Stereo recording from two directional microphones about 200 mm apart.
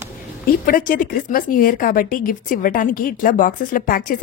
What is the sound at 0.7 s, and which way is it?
A woman's voice, 45° left (ahead or behind).